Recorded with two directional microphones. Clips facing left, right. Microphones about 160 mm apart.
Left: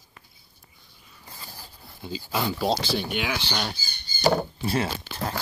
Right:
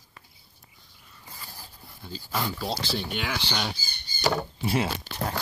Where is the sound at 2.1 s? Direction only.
10° left (ahead or behind).